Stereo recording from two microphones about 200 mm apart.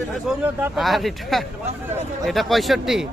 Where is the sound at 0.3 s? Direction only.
5° right (ahead or behind).